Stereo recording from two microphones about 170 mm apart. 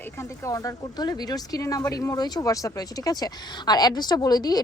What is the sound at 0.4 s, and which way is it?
Speech, 20° left (ahead or behind).